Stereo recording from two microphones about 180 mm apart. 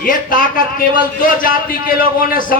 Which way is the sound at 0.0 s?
50° left (ahead or behind).